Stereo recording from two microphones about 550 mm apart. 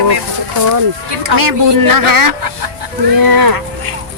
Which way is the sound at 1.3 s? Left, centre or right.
Right.